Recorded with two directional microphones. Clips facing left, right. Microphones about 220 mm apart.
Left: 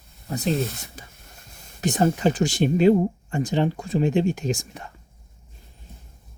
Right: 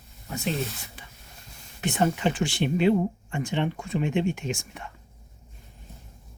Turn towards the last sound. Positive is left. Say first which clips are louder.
# left 5 dB
turn(degrees=35)  # may be behind; listen again after turning